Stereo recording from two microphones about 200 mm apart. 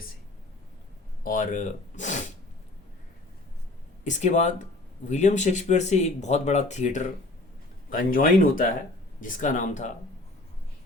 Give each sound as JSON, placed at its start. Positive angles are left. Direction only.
{"t": 1.2, "sound": "speech", "side_deg": 45}
{"t": 4.0, "sound": "speech", "side_deg": 35}